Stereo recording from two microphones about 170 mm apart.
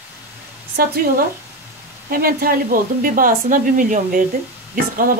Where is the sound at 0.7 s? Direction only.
65° right (ahead or behind).